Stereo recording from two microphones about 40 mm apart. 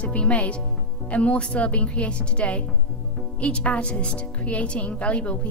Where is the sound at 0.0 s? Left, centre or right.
Left.